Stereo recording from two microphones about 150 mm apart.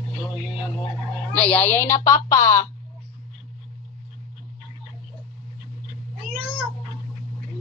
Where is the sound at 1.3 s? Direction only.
10° left (ahead or behind).